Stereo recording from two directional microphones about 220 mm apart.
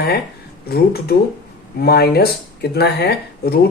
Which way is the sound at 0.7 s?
45° left (ahead or behind).